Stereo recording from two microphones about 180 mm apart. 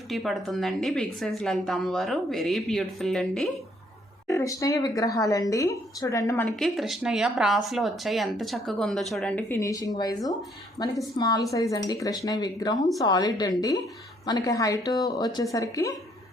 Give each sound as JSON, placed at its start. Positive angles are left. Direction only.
{"t": 0.1, "sound": "speech", "side_deg": 0}
{"t": 4.3, "sound": "a woman's voice", "side_deg": 20}
{"t": 6.6, "sound": "speech", "side_deg": 0}